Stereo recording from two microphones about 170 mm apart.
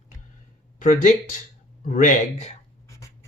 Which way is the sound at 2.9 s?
20° left (ahead or behind).